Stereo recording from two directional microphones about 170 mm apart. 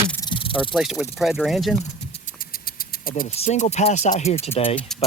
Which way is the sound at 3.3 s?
40° left (ahead or behind).